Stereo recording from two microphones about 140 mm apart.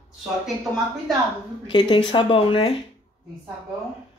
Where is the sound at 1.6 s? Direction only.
35° left (ahead or behind).